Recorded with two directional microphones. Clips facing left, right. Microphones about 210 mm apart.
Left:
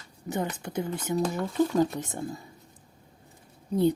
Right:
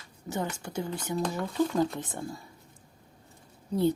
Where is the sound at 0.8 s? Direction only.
20° left (ahead or behind).